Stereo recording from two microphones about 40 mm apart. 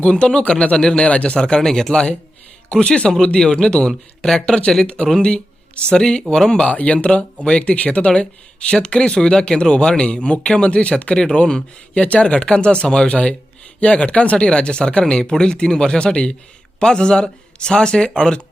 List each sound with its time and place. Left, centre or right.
0.0 s a man's voice: left
1.4 s a man's voice: centre
6.7 s a man's voice: left